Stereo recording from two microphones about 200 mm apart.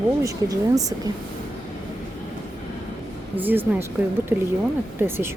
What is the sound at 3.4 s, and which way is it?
A woman's voice, 10° right (ahead or behind).